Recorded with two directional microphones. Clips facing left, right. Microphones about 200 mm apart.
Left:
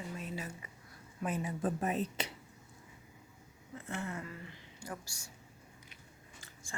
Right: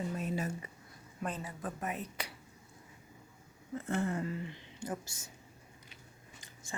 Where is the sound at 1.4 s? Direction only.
25° left (ahead or behind).